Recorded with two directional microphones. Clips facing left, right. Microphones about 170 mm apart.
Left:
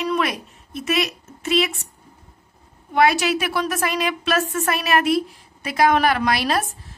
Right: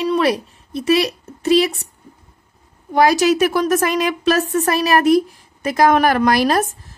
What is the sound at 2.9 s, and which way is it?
A woman's voice, 40° right (ahead or behind).